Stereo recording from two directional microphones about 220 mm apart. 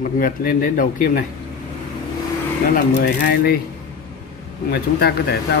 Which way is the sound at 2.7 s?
45° left (ahead or behind).